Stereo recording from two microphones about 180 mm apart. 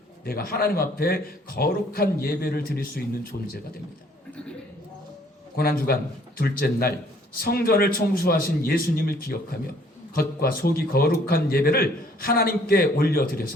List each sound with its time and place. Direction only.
0.3 s a man's voice: 55° left (ahead or behind)
5.5 s a man's voice: 55° left (ahead or behind)